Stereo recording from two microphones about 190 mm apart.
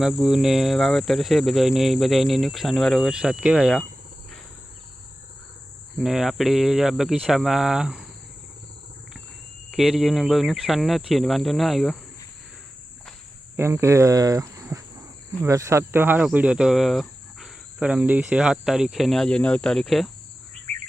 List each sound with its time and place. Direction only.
0.0 s speech: centre (ahead or behind)
6.0 s speech: centre (ahead or behind)
9.7 s speech: centre (ahead or behind)
13.6 s speech: 15° right (ahead or behind); by 20.1 s centre (ahead or behind)